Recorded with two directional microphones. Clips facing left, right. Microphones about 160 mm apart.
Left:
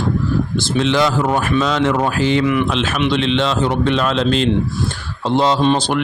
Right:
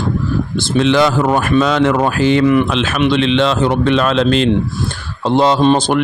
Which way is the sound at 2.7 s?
75° right (ahead or behind).